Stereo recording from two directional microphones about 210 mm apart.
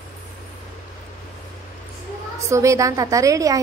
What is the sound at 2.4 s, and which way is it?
A woman's voice, 15° right (ahead or behind).